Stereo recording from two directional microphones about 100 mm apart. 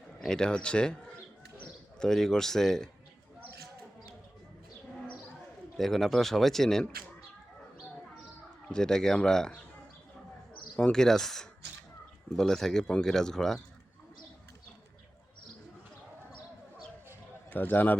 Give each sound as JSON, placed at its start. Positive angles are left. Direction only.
{"t": 0.2, "sound": "a man's voice", "side_deg": 5}
{"t": 5.7, "sound": "a man's voice", "side_deg": 0}
{"t": 8.7, "sound": "speech", "side_deg": 5}
{"t": 10.8, "sound": "a man's voice", "side_deg": 5}
{"t": 17.5, "sound": "a man's voice", "side_deg": 20}